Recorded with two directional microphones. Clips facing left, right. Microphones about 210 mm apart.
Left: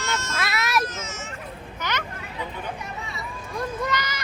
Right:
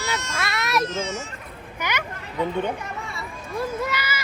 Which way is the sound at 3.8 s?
5° right (ahead or behind).